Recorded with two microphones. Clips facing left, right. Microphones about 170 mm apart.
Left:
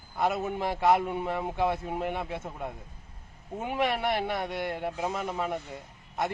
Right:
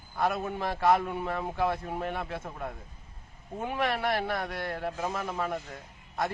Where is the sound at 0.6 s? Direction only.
20° left (ahead or behind).